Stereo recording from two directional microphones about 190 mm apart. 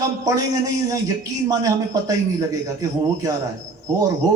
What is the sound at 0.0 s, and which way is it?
A man's voice, 15° right (ahead or behind).